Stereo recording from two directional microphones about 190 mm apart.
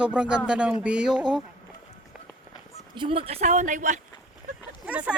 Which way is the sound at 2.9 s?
25° right (ahead or behind).